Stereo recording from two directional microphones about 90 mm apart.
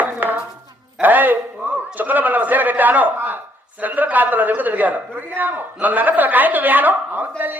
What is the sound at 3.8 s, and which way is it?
A man's voice, 20° right (ahead or behind).